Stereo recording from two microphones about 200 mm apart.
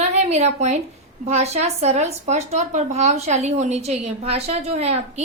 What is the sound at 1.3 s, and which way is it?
A woman's voice, 35° right (ahead or behind).